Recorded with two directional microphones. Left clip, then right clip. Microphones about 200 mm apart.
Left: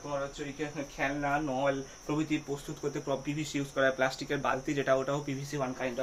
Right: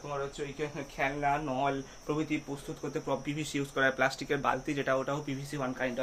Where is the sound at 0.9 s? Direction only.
50° right (ahead or behind).